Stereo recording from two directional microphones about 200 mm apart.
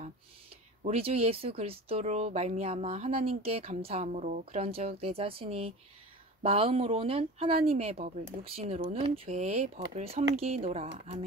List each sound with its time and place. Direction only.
0.8 s speech: 30° right (ahead or behind)